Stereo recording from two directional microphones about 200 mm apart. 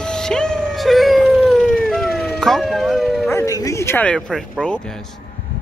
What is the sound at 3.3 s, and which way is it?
Bow-wow, 15° left (ahead or behind).